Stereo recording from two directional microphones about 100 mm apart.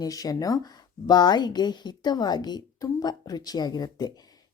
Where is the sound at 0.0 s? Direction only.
40° left (ahead or behind).